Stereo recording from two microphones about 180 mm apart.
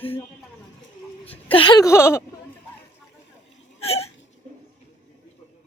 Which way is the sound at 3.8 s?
35° left (ahead or behind).